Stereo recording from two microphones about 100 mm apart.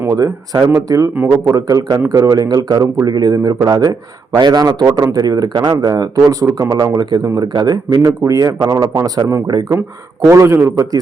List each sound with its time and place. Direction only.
0.1 s speech: 40° right (ahead or behind)
1.1 s speech: 25° right (ahead or behind); by 9.6 s 45° right (ahead or behind)
10.2 s speech: 30° right (ahead or behind)